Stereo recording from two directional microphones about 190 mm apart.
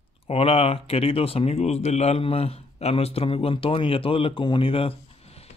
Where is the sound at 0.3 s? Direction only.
30° left (ahead or behind).